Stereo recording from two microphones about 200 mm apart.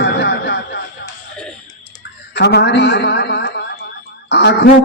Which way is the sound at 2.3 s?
60° left (ahead or behind).